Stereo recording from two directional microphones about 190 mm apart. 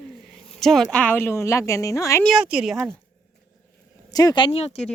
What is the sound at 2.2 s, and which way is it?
Speech, 5° right (ahead or behind).